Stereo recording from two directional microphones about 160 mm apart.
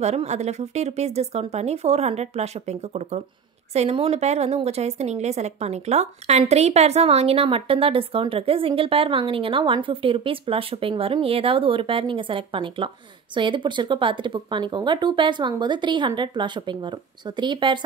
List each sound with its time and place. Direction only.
0.0 s a woman's voice: 45° right (ahead or behind)